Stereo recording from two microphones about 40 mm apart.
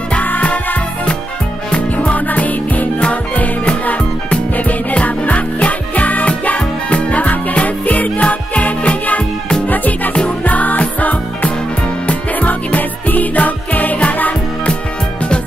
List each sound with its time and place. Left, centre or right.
0.2 s music: left
2.1 s music: left
3.0 s music: left